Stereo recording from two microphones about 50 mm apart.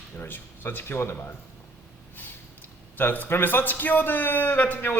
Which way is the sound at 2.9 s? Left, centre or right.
Left.